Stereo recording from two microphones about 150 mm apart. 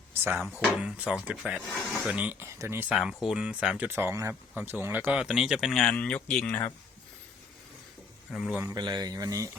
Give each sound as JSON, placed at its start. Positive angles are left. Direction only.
{"t": 0.8, "sound": "speech", "side_deg": -5}
{"t": 2.9, "sound": "speech", "side_deg": 0}
{"t": 3.8, "sound": "speech", "side_deg": -15}
{"t": 8.3, "sound": "speech", "side_deg": 0}
{"t": 8.6, "sound": "speech", "side_deg": -25}